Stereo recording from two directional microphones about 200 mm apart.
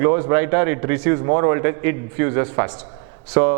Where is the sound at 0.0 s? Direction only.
15° right (ahead or behind).